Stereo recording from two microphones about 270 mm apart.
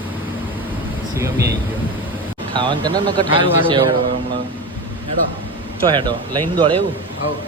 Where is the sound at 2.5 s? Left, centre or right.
Centre.